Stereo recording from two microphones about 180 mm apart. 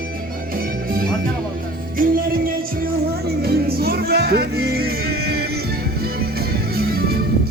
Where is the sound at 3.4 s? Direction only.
60° right (ahead or behind).